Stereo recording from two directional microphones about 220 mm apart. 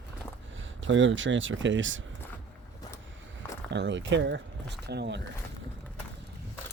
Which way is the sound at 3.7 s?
55° right (ahead or behind).